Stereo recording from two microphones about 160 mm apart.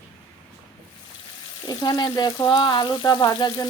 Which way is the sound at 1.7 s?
25° left (ahead or behind).